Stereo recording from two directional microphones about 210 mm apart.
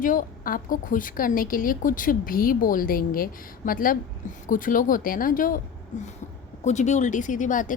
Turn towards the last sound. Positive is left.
turn(degrees=40)  # may be behind; listen again after turning